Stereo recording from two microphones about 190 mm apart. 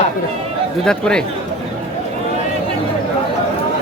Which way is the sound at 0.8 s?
5° left (ahead or behind).